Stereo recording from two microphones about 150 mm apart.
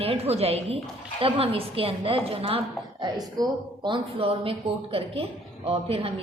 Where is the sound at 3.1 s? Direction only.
30° right (ahead or behind).